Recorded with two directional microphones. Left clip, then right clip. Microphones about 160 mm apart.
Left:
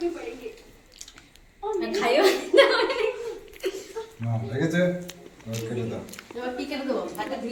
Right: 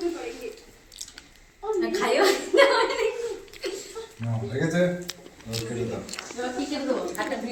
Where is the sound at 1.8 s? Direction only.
60° left (ahead or behind).